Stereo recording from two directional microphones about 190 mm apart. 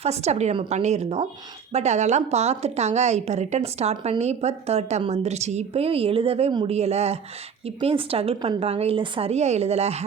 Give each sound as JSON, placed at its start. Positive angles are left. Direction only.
{"t": 0.0, "sound": "a woman's voice", "side_deg": -35}